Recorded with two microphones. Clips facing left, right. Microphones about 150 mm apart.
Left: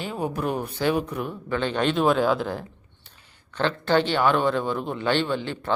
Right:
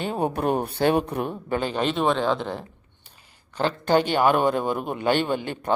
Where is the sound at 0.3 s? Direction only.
60° right (ahead or behind).